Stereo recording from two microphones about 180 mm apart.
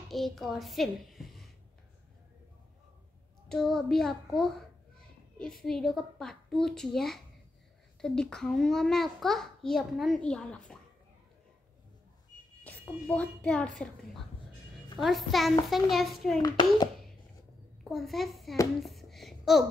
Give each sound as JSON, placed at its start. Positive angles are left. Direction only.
{"t": 0.1, "sound": "a child's voice", "side_deg": 0}
{"t": 3.4, "sound": "a child's voice", "side_deg": 5}
{"t": 12.6, "sound": "a child's voice", "side_deg": 10}
{"t": 16.4, "sound": "a child's voice", "side_deg": 20}
{"t": 17.8, "sound": "a child's voice", "side_deg": 0}
{"t": 18.8, "sound": "a sound", "side_deg": 0}